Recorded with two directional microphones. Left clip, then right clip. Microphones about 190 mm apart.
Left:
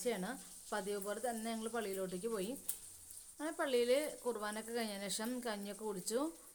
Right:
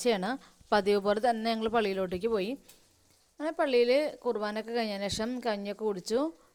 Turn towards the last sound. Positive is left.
turn(degrees=-40)  # may be behind; listen again after turning